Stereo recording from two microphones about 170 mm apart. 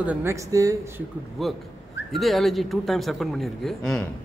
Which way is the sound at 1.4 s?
Centre (ahead or behind).